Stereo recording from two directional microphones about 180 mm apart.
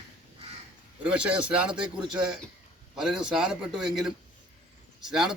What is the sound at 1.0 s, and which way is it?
A man's voice, 5° right (ahead or behind).